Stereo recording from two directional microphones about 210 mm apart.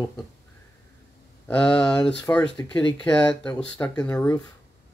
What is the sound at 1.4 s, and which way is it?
A man's voice, 5° left (ahead or behind).